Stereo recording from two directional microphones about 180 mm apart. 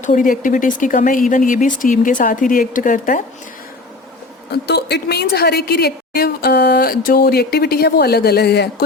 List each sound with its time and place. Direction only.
0.0 s speech: 45° left (ahead or behind)
4.5 s a woman's voice: 65° left (ahead or behind)